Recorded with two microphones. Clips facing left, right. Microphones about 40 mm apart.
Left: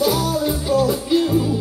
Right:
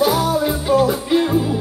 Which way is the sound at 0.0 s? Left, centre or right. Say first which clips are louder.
Right 3 dB; right.